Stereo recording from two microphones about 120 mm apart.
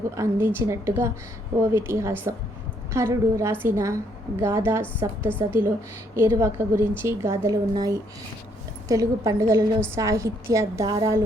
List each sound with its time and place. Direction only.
0.2 s a woman's voice: 20° right (ahead or behind)